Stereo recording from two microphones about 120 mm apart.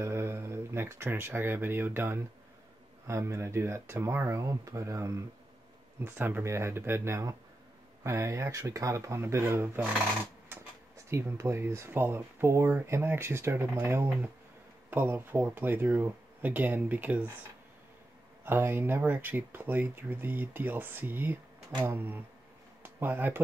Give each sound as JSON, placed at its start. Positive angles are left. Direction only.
{"t": 0.0, "sound": "speech", "side_deg": -20}
{"t": 11.1, "sound": "speech", "side_deg": -20}
{"t": 18.4, "sound": "speech", "side_deg": -20}